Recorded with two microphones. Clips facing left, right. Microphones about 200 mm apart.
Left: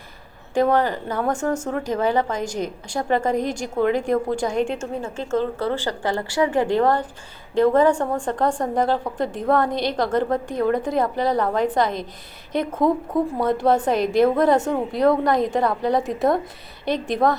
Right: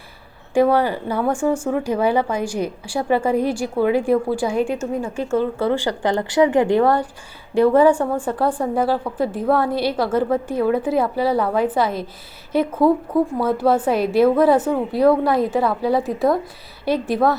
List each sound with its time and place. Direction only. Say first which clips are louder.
0.5 s speech: right 3 dB; 10° right (ahead or behind)
4.8 s speech: right 4 dB; 25° left (ahead or behind)
5.4 s a woman's voice: right 4 dB; 15° right (ahead or behind)